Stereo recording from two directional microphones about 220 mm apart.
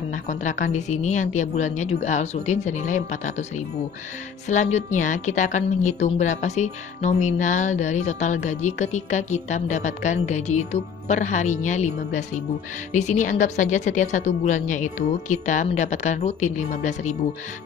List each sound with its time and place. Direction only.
0.3 s a woman's voice: 35° left (ahead or behind)